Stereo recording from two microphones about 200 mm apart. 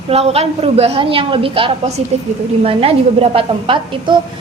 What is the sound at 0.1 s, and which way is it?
A woman's voice, 30° right (ahead or behind).